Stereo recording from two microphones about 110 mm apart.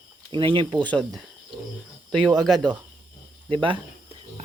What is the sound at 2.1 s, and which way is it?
Speech, 5° left (ahead or behind).